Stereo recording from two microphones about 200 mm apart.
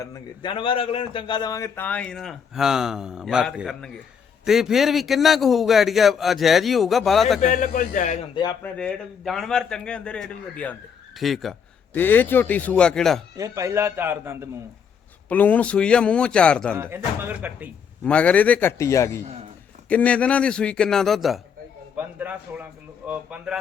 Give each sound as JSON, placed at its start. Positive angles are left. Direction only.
{"t": 0.0, "sound": "a man's voice", "side_deg": 20}
{"t": 7.4, "sound": "speech", "side_deg": 40}
{"t": 8.6, "sound": "a man's voice", "side_deg": 5}
{"t": 13.3, "sound": "speech", "side_deg": -15}
{"t": 15.3, "sound": "a man's voice", "side_deg": 10}
{"t": 16.7, "sound": "speech", "side_deg": -10}
{"t": 18.0, "sound": "a man's voice", "side_deg": 5}